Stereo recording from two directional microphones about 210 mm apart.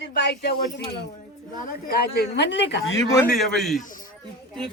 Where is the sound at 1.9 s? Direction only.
50° left (ahead or behind).